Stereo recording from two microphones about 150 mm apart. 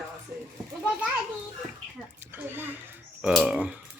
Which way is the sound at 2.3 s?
15° right (ahead or behind).